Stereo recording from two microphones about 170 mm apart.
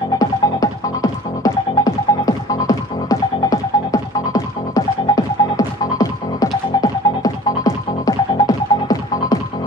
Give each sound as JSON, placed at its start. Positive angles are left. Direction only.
{"t": 0.2, "sound": "music", "side_deg": 20}